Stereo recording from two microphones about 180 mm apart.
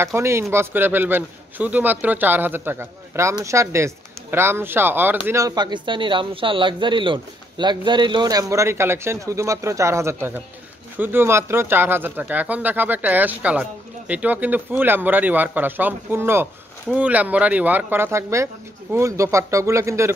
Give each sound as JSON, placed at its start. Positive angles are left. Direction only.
{"t": 0.0, "sound": "speech", "side_deg": -15}